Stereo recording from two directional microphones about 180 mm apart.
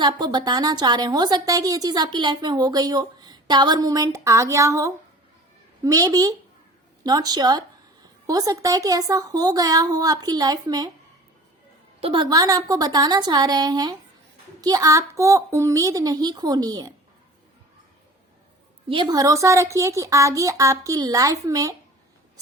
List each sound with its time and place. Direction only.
0.0 s a woman's voice: 25° right (ahead or behind)
11.9 s a woman's voice: 30° right (ahead or behind)
18.9 s a woman's voice: 25° right (ahead or behind)